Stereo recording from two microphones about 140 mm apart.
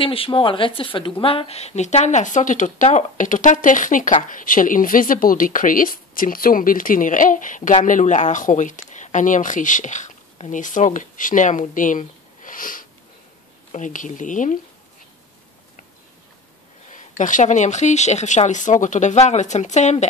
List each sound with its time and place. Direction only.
0.0 s speech: 40° left (ahead or behind); by 12.8 s 80° left
13.7 s speech: 60° left (ahead or behind)
16.9 s speech: 65° left (ahead or behind)